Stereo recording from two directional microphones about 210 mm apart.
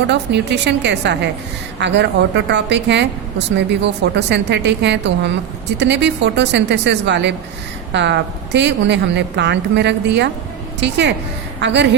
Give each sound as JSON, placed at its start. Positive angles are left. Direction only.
{"t": 0.1, "sound": "a woman's voice", "side_deg": -55}